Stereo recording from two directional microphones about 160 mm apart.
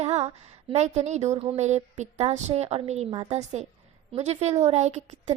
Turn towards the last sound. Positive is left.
turn(degrees=-45)  # may be behind; listen again after turning